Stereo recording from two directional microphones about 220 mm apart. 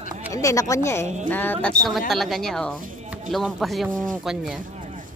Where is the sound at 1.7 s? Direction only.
15° right (ahead or behind).